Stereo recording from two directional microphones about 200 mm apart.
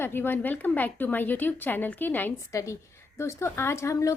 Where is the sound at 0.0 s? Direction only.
10° left (ahead or behind).